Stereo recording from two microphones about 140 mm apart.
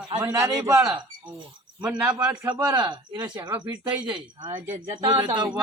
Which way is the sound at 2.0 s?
10° right (ahead or behind).